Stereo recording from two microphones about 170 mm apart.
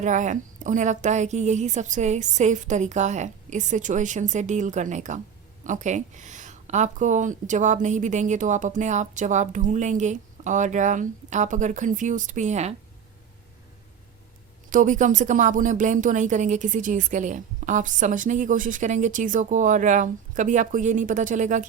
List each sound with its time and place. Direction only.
0.0 s speech: 45° right (ahead or behind)
14.7 s speech: 50° right (ahead or behind)